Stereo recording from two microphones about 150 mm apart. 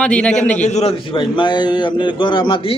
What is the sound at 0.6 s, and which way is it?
A man's voice, 45° left (ahead or behind).